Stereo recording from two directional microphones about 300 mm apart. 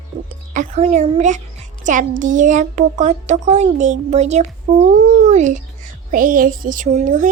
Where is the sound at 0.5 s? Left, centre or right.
Right.